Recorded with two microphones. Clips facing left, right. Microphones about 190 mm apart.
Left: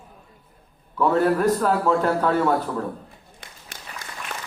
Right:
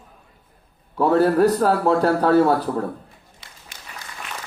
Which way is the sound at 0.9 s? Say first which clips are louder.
Right 3 dB; 35° right (ahead or behind).